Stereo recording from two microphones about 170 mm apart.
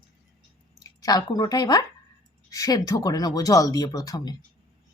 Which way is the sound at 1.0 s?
20° left (ahead or behind).